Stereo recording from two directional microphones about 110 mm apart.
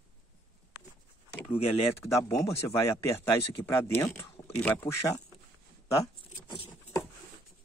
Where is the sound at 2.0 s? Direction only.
25° left (ahead or behind).